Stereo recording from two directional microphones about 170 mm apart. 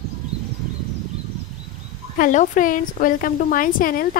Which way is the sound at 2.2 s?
50° left (ahead or behind).